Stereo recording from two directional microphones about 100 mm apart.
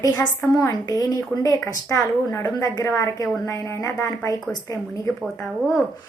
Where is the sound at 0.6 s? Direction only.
40° left (ahead or behind).